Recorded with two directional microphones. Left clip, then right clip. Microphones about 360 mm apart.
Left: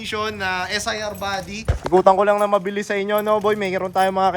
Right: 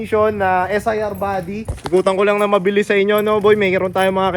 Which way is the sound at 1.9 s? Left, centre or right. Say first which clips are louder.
Even; centre.